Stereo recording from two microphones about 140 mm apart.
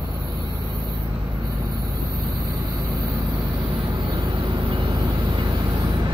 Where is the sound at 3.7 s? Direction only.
35° right (ahead or behind).